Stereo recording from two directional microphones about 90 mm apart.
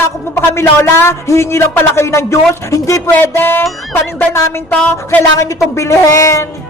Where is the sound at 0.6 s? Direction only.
30° left (ahead or behind).